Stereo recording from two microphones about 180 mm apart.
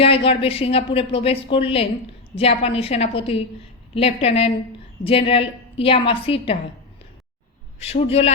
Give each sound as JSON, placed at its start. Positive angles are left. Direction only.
{"t": 0.0, "sound": "speech", "side_deg": 30}
{"t": 7.8, "sound": "speech", "side_deg": 35}